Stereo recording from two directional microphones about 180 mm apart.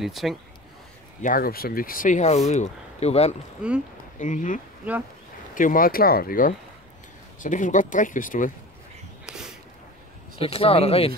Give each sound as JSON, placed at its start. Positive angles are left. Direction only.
{"t": 0.0, "sound": "speech", "side_deg": 0}
{"t": 1.2, "sound": "speech", "side_deg": 55}
{"t": 3.6, "sound": "speech", "side_deg": -5}
{"t": 4.2, "sound": "speech", "side_deg": 45}
{"t": 9.2, "sound": "a sound", "side_deg": -5}
{"t": 10.4, "sound": "speech", "side_deg": 30}